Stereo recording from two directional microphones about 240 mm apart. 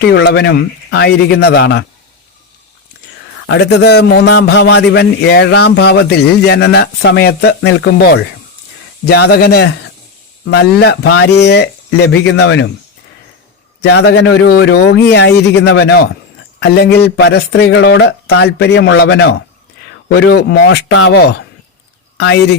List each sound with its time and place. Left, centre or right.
0.1 s a man's voice: left
3.4 s a man's voice: left
13.8 s a man's voice: left